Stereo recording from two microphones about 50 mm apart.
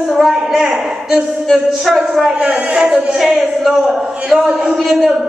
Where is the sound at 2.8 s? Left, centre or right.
Centre.